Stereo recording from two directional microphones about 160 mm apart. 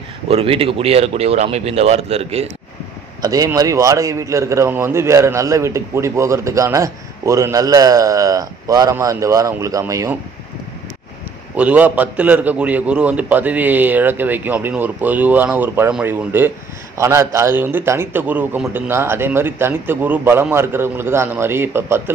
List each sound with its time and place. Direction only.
0.3 s speech: 35° right (ahead or behind)
3.2 s a man's voice: 20° right (ahead or behind)
11.5 s a man's voice: 10° right (ahead or behind)